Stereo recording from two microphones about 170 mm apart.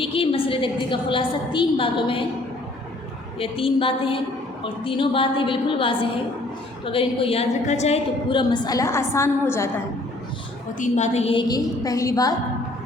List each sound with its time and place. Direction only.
0.0 s a woman's voice: 30° left (ahead or behind)
3.3 s a woman's voice: 35° left (ahead or behind); by 9.6 s 15° left (ahead or behind)
10.8 s a woman's voice: 45° left (ahead or behind); by 12.3 s 20° left (ahead or behind)